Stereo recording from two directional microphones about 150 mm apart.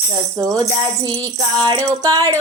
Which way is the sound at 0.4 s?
25° right (ahead or behind).